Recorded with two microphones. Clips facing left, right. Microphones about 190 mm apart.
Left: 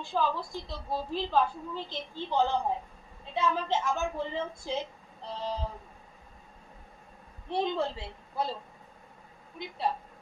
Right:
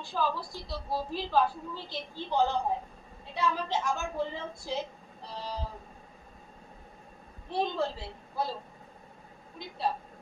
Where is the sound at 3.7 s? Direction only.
15° right (ahead or behind).